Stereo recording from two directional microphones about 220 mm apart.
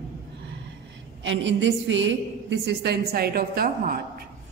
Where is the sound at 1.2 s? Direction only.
55° right (ahead or behind).